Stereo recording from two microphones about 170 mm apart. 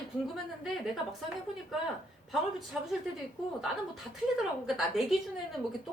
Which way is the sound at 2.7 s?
5° right (ahead or behind).